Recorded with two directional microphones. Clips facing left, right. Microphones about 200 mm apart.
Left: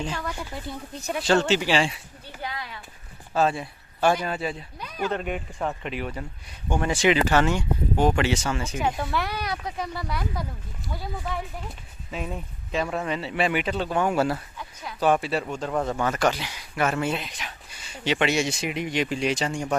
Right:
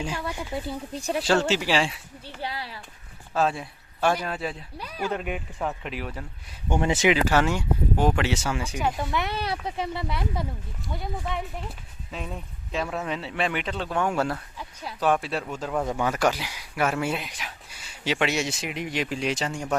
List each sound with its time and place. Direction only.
0.0 s speech: 10° right (ahead or behind)
0.9 s speech: 30° right (ahead or behind)
1.2 s speech: 5° right (ahead or behind)
2.2 s speech: 30° right (ahead or behind)
3.3 s a man's voice: centre (ahead or behind)
6.7 s speech: 20° right (ahead or behind)
7.1 s speech: 5° right (ahead or behind)
9.1 s speech: 25° right (ahead or behind)
11.3 s speech: centre (ahead or behind)